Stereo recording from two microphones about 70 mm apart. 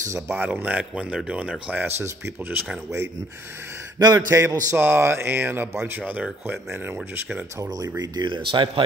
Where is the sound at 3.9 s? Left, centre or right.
Right.